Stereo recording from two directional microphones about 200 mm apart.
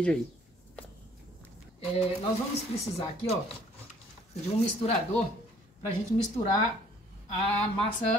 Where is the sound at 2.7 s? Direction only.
30° left (ahead or behind).